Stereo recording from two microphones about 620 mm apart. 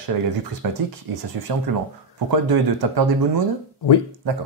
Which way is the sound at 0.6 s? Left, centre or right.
Right.